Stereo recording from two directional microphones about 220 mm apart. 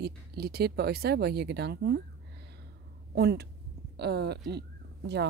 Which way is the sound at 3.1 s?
50° right (ahead or behind).